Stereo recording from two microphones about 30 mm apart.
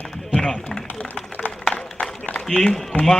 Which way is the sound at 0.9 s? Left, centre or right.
Left.